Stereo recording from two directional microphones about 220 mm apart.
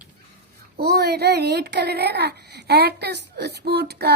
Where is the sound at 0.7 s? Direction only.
45° right (ahead or behind).